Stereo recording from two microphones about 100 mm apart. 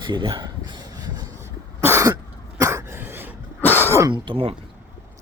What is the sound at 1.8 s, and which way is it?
Cough, 25° right (ahead or behind).